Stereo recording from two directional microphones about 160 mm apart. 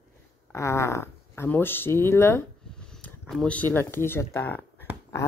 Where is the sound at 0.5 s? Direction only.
15° left (ahead or behind).